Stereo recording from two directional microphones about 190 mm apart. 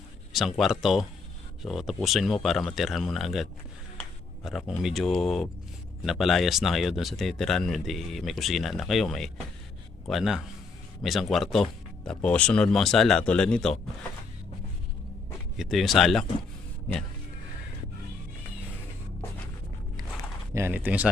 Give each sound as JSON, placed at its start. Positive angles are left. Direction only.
{"t": 0.3, "sound": "speech", "side_deg": 0}
{"t": 4.4, "sound": "speech", "side_deg": 0}
{"t": 15.5, "sound": "speech", "side_deg": 0}
{"t": 20.5, "sound": "speech", "side_deg": -15}